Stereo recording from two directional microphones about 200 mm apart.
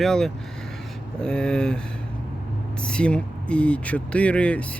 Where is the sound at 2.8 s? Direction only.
5° left (ahead or behind).